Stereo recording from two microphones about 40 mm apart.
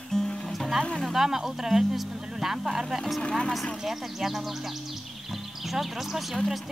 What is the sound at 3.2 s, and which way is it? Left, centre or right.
Speech, centre.